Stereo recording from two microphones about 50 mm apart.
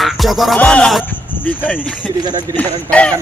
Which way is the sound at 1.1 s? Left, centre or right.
Left.